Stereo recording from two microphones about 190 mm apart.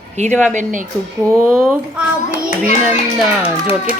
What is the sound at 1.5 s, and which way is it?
Speech, centre (ahead or behind).